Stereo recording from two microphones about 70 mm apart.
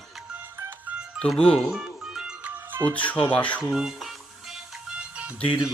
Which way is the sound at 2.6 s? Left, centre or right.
Right.